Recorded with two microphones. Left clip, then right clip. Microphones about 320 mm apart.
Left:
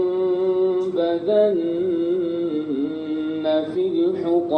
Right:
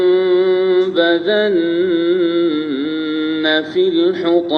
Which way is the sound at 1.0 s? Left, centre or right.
Right.